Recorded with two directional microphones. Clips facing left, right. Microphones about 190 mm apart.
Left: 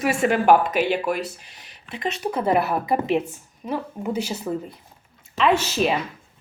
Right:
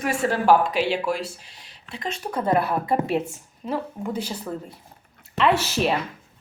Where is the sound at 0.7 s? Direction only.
55° left (ahead or behind).